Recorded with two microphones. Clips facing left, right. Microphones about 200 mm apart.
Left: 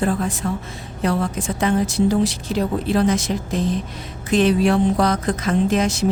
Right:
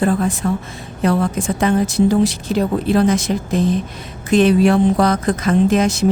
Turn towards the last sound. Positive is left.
turn(degrees=-50)  # may be behind; listen again after turning